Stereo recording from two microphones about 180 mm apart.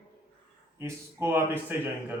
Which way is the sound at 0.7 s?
15° right (ahead or behind).